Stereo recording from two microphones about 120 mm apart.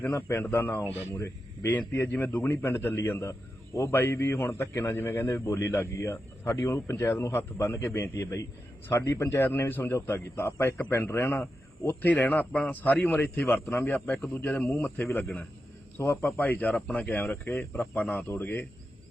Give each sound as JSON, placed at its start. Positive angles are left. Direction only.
{"t": 0.0, "sound": "a man's voice", "side_deg": 20}